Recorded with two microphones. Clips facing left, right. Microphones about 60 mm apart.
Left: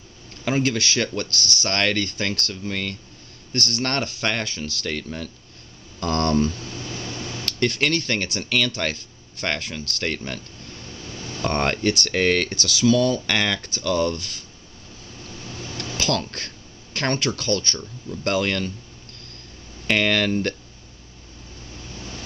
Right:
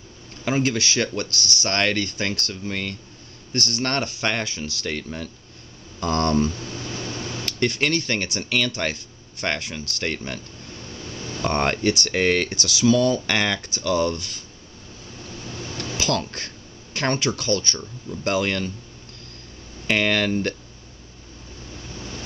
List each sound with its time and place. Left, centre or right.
0.5 s speech: centre
11.4 s speech: centre
15.8 s speech: centre
19.9 s speech: centre